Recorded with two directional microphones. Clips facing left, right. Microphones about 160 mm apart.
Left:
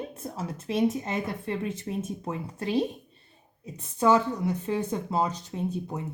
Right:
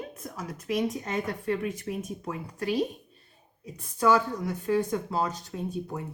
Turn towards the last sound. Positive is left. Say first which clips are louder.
# left 2 dB
turn(degrees=20)  # may be behind; listen again after turning